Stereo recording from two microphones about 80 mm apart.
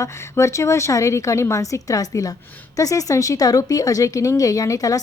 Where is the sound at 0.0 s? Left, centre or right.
Left.